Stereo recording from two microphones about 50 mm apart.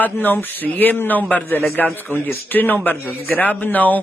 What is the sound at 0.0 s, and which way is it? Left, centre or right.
A man's voice, left.